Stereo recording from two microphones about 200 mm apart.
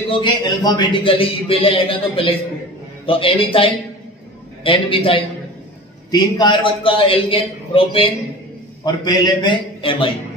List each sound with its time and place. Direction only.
0.1 s a man's voice: 25° left (ahead or behind)
4.6 s a man's voice: 25° left (ahead or behind)